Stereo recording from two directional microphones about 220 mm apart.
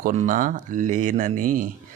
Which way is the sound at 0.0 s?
35° right (ahead or behind).